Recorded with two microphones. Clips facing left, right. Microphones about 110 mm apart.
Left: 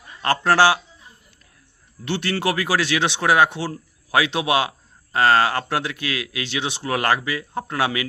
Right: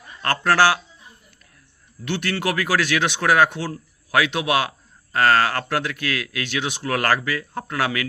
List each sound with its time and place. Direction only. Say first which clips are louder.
0.2 s speech: left 1 dB; 25° left (ahead or behind)
2.0 s speech: left 1 dB; 30° left (ahead or behind)